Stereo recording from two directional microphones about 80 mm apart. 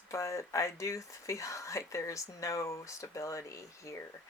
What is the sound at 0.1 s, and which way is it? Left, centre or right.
Speech, left.